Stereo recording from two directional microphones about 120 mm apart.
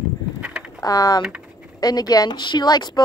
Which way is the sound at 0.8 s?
30° left (ahead or behind).